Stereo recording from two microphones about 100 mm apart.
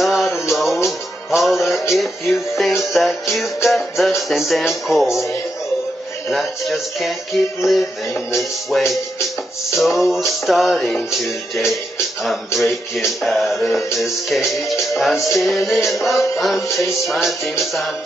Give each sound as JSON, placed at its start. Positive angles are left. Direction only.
{"t": 0.0, "sound": "music", "side_deg": 0}
{"t": 5.1, "sound": "music", "side_deg": 30}
{"t": 6.3, "sound": "music", "side_deg": 0}
{"t": 11.5, "sound": "speech", "side_deg": 0}
{"t": 12.5, "sound": "music", "side_deg": 0}
{"t": 16.6, "sound": "music", "side_deg": 30}
{"t": 17.1, "sound": "music", "side_deg": 0}